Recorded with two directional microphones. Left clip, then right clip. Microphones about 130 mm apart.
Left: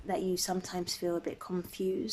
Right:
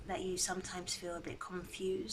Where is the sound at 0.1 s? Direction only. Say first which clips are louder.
Left 6 dB; 45° left (ahead or behind).